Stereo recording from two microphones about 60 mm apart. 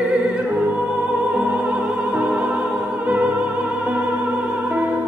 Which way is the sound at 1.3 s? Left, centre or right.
Right.